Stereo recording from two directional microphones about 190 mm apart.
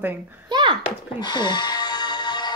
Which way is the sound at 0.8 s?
25° left (ahead or behind).